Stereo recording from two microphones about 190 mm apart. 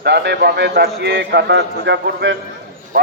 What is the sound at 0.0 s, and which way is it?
A man's voice, 65° right (ahead or behind).